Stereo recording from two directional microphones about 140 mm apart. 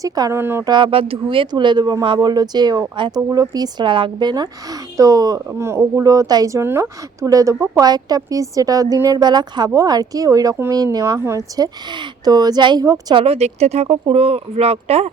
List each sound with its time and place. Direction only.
0.0 s speech: 25° right (ahead or behind)
0.6 s speech: 35° right (ahead or behind)
13.1 s speech: 45° right (ahead or behind)